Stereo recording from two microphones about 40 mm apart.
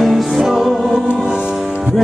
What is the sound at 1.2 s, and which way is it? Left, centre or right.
Music, right.